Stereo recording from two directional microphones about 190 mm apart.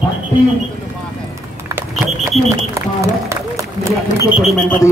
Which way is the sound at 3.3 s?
15° right (ahead or behind).